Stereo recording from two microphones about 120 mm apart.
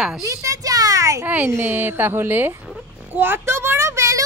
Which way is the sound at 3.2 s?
20° right (ahead or behind).